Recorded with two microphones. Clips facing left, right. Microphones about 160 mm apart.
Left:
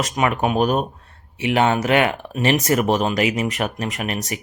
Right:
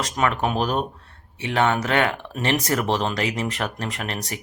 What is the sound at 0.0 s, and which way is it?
Speech, 15° left (ahead or behind).